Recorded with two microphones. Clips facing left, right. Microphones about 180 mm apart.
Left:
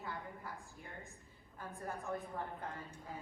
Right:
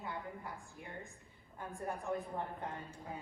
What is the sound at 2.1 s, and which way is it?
Speech, 15° right (ahead or behind).